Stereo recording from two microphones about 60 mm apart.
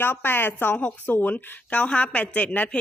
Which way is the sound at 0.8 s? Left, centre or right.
Left.